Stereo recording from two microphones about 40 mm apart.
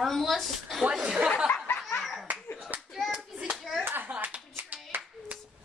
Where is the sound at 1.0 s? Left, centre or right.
Right.